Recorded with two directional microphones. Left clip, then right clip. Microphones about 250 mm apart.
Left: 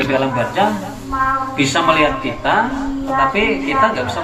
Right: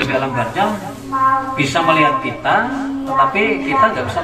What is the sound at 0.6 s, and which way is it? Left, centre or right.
A man's voice, left.